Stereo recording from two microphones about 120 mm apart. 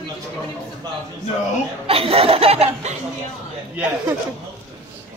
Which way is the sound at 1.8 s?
55° right (ahead or behind).